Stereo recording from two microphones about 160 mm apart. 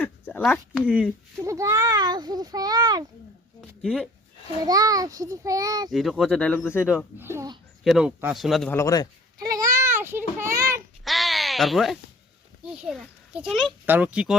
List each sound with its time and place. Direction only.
0.0 s a sound: 10° left (ahead or behind)
0.4 s speech: centre (ahead or behind)
1.4 s a sound: 20° right (ahead or behind)
4.6 s a child's voice: 25° right (ahead or behind)
5.9 s speech: centre (ahead or behind)
6.9 s speech: 15° right (ahead or behind)
8.7 s speech: 20° left (ahead or behind)
9.4 s child singing: 20° right (ahead or behind)
11.0 s a sound: centre (ahead or behind)
12.7 s a child's voice: centre (ahead or behind)